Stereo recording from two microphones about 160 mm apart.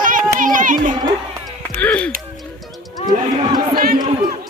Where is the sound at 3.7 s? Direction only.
65° right (ahead or behind).